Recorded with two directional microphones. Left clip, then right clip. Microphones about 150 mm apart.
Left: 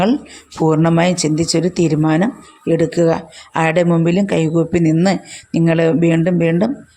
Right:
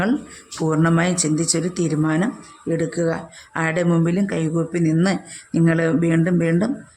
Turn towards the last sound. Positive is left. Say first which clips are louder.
# left 5 dB
turn(degrees=20)  # may be behind; listen again after turning